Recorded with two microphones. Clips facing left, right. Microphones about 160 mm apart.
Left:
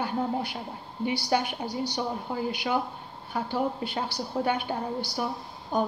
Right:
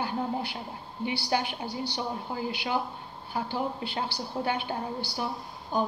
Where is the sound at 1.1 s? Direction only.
45° left (ahead or behind).